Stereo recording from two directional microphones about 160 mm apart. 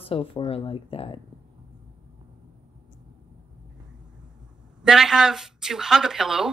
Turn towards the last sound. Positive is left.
turn(degrees=-5)  # may be behind; listen again after turning